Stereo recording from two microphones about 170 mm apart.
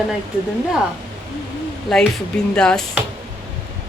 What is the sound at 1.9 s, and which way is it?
Speech, 5° left (ahead or behind).